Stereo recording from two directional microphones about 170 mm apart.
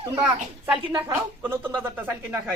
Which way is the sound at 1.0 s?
10° right (ahead or behind).